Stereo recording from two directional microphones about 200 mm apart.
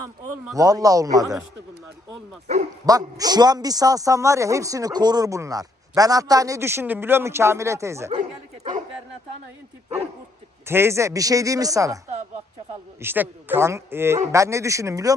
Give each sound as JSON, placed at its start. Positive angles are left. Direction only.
{"t": 0.5, "sound": "a man's voice", "side_deg": -15}
{"t": 2.8, "sound": "a man's voice", "side_deg": -20}
{"t": 10.7, "sound": "a man's voice", "side_deg": -10}
{"t": 13.0, "sound": "a man's voice", "side_deg": -10}